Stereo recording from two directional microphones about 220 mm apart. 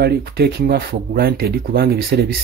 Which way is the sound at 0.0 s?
45° right (ahead or behind).